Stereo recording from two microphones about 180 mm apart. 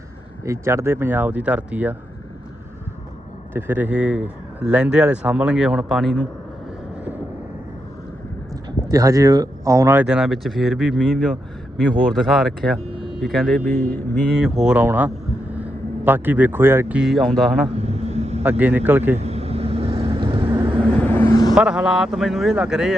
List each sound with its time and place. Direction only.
0.4 s speech: 15° right (ahead or behind)
3.5 s speech: 10° right (ahead or behind)
8.9 s speech: 20° right (ahead or behind); by 13.6 s centre (ahead or behind)
13.7 s speech: 10° left (ahead or behind)
14.3 s speech: 5° right (ahead or behind)
17.7 s vehicle: 35° right (ahead or behind)
18.4 s speech: 10° right (ahead or behind)
19.2 s vehicle: 35° right (ahead or behind)
21.0 s vehicle: 10° left (ahead or behind)
21.5 s speech: 5° right (ahead or behind)